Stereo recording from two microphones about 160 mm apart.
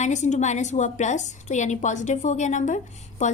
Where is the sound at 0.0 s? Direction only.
45° left (ahead or behind).